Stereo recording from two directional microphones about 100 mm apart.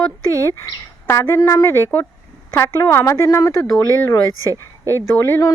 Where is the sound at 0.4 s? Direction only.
30° left (ahead or behind).